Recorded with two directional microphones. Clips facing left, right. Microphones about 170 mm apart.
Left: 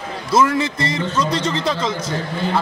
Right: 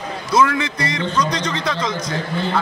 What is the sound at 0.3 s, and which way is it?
A man's voice, 25° left (ahead or behind).